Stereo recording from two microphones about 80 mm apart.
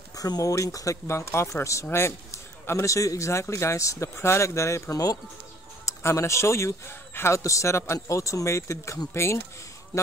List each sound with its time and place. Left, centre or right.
0.1 s speech: left